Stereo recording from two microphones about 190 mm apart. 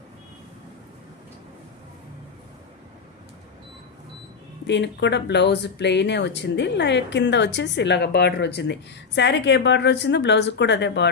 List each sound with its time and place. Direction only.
4.6 s speech: 65° left (ahead or behind)